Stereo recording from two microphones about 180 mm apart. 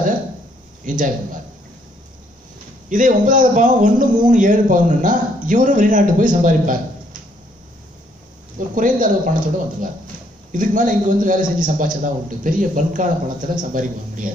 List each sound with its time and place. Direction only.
0.8 s a man's voice: 45° right (ahead or behind)
2.9 s a man's voice: 45° right (ahead or behind)
8.7 s a man's voice: 45° right (ahead or behind)